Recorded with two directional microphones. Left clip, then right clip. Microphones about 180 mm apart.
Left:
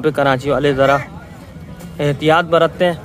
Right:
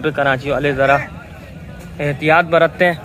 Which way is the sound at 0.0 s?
25° left (ahead or behind).